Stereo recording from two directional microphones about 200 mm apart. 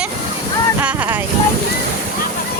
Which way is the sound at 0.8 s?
5° right (ahead or behind).